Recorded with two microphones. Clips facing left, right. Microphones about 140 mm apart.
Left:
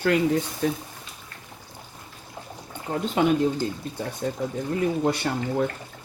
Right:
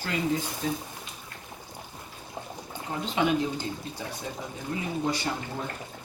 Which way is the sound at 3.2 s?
50° left (ahead or behind).